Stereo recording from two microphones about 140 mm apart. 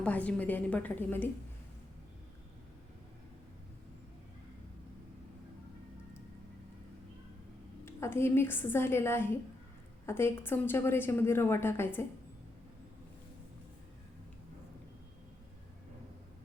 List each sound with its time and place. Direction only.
0.0 s a woman's voice: 10° left (ahead or behind)
7.9 s a woman's voice: 20° left (ahead or behind)